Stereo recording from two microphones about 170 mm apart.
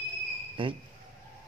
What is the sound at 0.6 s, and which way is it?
Speech, 30° right (ahead or behind).